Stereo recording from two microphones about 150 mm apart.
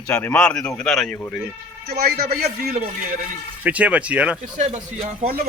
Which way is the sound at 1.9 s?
90° right.